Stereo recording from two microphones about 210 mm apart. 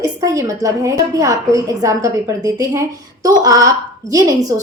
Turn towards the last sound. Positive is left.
turn(degrees=-15)  # may be behind; listen again after turning